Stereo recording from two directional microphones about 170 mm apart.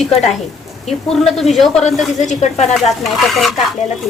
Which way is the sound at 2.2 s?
45° left (ahead or behind).